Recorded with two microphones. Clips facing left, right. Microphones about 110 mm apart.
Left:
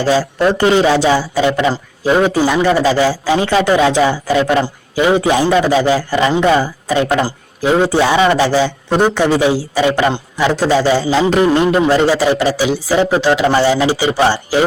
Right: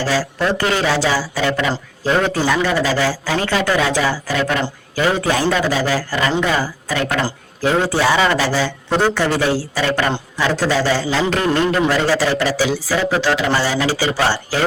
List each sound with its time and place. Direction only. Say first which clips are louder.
0.0 s a man's voice: left 6 dB; 20° left (ahead or behind)